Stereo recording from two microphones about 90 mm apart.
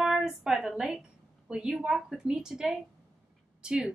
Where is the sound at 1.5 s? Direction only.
5° right (ahead or behind).